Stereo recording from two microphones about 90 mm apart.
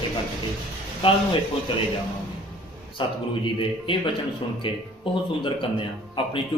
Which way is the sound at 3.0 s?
80° left.